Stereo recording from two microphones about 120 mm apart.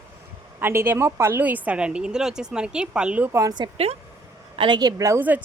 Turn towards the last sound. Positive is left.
turn(degrees=-15)  # may be behind; listen again after turning